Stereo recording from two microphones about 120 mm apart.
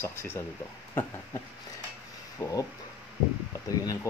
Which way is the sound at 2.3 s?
30° left (ahead or behind).